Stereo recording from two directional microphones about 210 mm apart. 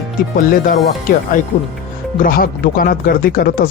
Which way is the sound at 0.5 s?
45° left (ahead or behind).